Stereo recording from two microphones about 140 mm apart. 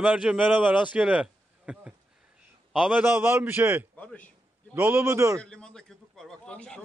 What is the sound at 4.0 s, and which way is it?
Speech, 10° left (ahead or behind).